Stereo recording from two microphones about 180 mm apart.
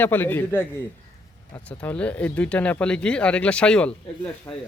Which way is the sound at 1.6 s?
5° left (ahead or behind).